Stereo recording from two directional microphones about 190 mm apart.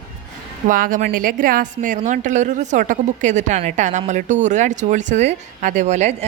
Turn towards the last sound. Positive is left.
turn(degrees=-35)  # may be behind; listen again after turning